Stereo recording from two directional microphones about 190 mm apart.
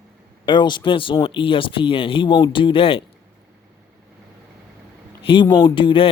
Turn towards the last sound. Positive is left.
turn(degrees=25)  # may be behind; listen again after turning